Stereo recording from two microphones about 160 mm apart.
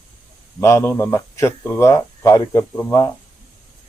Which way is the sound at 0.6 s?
15° left (ahead or behind).